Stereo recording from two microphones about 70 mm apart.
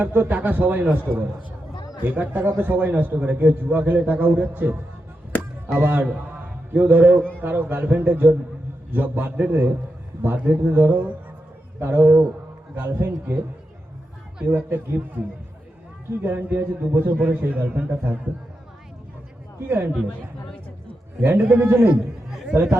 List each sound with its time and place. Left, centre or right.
0.0 s a man's voice: right
1.7 s chatter: left
2.0 s a man's voice: right
7.2 s a man's voice: centre
7.4 s a man's voice: right
14.4 s speech: right
16.2 s a man's voice: right
19.5 s speech: right
19.9 s speech: centre
21.2 s speech: right